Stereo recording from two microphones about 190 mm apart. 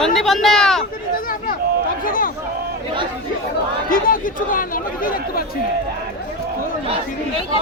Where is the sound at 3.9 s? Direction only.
45° left (ahead or behind).